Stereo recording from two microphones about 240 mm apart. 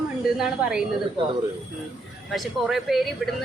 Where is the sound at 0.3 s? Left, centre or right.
Centre.